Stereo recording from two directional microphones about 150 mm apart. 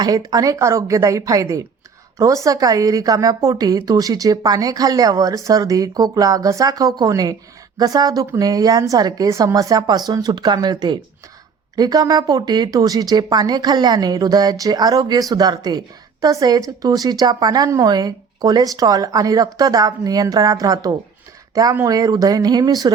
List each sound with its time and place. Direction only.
0.0 s a woman's voice: 25° right (ahead or behind)